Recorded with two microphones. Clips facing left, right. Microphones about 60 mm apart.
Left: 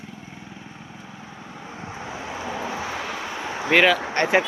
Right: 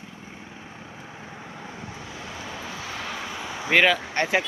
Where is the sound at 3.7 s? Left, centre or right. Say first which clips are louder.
Left 2 dB; centre.